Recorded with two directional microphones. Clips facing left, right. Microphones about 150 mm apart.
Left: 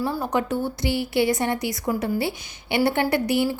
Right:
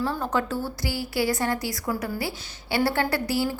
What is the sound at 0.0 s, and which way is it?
A woman's voice, 15° left (ahead or behind).